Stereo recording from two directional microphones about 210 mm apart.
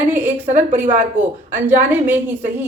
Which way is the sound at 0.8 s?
40° right (ahead or behind).